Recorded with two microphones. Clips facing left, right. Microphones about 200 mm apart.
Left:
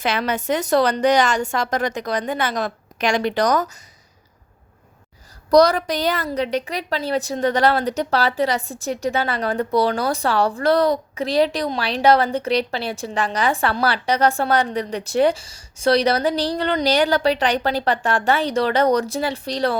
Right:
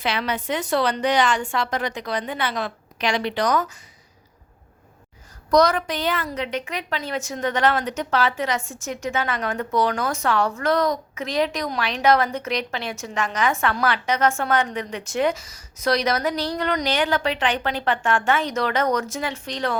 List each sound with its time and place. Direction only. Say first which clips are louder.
0.0 s a woman's voice: left 3 dB; 45° left (ahead or behind)
5.5 s a woman's voice: left 4 dB; 35° left (ahead or behind)